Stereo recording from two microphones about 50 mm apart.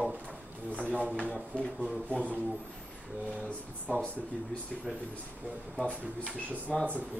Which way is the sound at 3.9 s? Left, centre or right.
Left.